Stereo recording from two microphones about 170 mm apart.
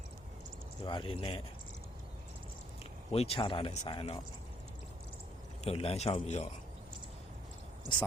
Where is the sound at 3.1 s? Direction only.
35° left (ahead or behind).